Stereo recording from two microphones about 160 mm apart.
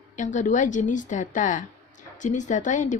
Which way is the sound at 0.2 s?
50° left (ahead or behind).